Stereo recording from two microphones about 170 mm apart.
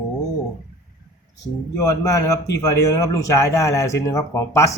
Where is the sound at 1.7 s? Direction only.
20° left (ahead or behind).